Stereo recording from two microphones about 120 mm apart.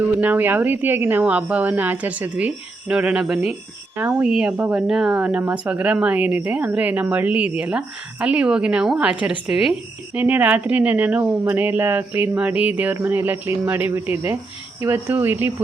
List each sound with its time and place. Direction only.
0.2 s a woman's voice: 15° right (ahead or behind)